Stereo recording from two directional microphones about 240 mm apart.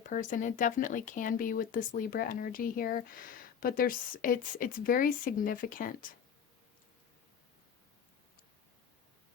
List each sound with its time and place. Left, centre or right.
0.1 s speech: left